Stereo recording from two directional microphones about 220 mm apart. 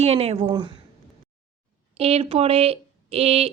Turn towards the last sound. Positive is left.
turn(degrees=-25)  # may be behind; listen again after turning